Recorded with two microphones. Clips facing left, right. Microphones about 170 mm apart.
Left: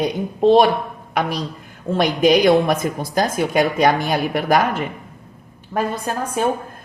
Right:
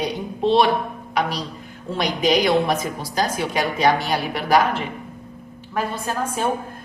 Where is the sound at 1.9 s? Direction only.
50° left (ahead or behind).